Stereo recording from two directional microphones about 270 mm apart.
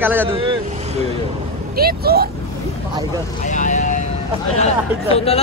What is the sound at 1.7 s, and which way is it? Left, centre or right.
Speech, right.